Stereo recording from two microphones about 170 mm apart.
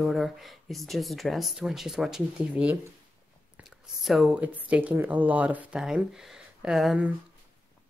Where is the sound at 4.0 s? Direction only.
Centre (ahead or behind).